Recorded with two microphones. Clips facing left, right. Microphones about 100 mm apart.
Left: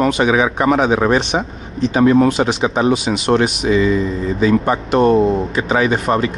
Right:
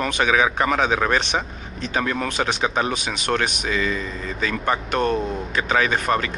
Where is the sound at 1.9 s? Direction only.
15° left (ahead or behind).